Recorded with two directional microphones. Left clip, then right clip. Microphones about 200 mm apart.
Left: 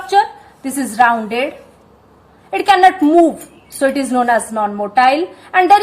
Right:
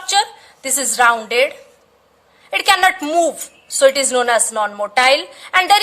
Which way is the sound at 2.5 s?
40° right (ahead or behind).